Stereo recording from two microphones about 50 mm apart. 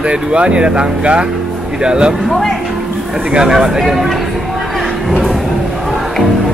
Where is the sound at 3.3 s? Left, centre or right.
Centre.